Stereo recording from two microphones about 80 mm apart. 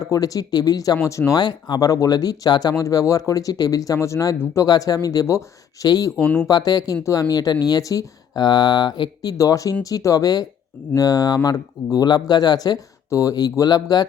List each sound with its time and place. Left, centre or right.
0.0 s speech: left
4.6 s speech: left
6.1 s speech: centre
6.5 s speech: left
9.4 s speech: left